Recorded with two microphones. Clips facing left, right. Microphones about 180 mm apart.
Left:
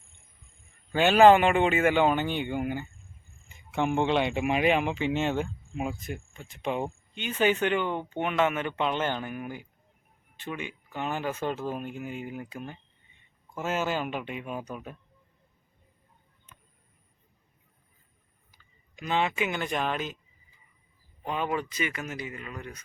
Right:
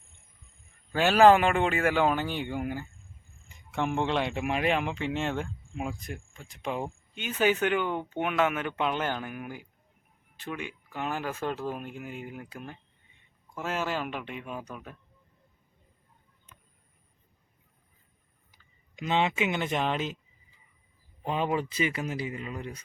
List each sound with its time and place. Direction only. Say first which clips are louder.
0.9 s speech: left 1 dB; centre (ahead or behind)
18.5 s speech: right 2 dB; 20° right (ahead or behind)
21.2 s speech: right 2 dB; 30° right (ahead or behind)